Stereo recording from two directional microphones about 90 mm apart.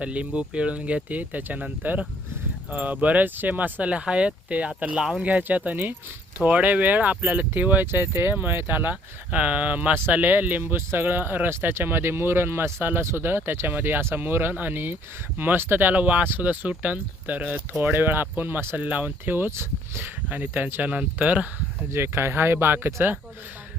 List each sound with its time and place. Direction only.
0.0 s speech: 15° right (ahead or behind)
5.4 s speech: 20° right (ahead or behind)
21.9 s speech: 25° right (ahead or behind)